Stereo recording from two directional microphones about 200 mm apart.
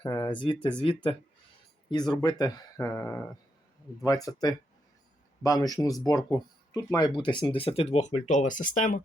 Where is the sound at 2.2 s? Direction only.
20° left (ahead or behind).